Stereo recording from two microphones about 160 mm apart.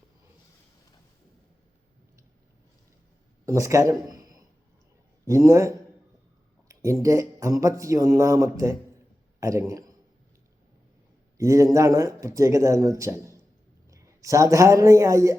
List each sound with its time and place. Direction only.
3.4 s a man's voice: 20° right (ahead or behind)
11.3 s speech: 20° right (ahead or behind)